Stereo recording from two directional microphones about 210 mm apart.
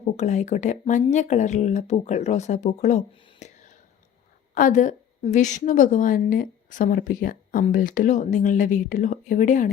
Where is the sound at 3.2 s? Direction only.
35° left (ahead or behind).